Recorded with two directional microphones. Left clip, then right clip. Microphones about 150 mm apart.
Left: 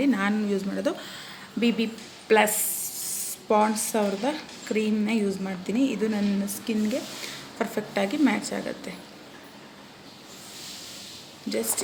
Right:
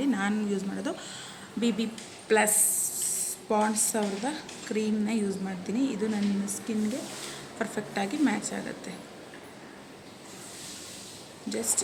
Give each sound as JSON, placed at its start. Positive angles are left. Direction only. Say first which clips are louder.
{"t": 0.0, "sound": "a woman's voice", "louder": "left 4 dB", "side_deg": -10}
{"t": 11.4, "sound": "speech", "louder": "left 4 dB", "side_deg": -10}